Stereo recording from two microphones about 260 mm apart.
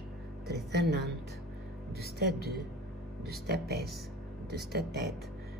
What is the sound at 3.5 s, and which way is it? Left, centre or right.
Speech, right.